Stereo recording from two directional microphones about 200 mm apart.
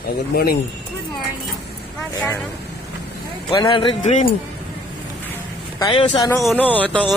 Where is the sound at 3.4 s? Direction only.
20° left (ahead or behind).